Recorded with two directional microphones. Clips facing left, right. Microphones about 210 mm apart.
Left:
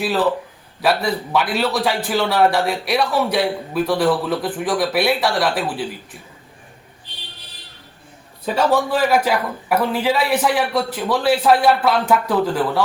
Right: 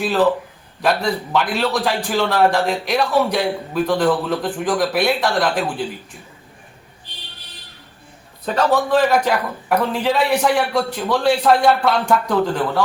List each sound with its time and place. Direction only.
0.8 s a man's voice: 5° left (ahead or behind)
8.4 s a man's voice: 10° left (ahead or behind)